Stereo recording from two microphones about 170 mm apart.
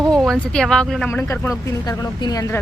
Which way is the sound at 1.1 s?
15° left (ahead or behind).